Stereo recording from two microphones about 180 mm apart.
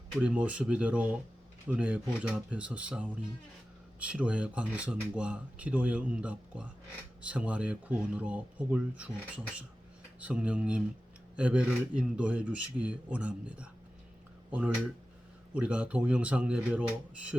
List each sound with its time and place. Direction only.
0.2 s speech: 5° right (ahead or behind)